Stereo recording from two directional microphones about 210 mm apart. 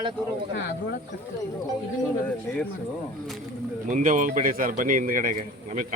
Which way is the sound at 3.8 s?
35° right (ahead or behind).